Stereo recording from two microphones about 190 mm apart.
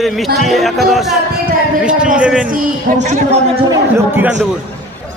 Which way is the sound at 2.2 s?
5° right (ahead or behind).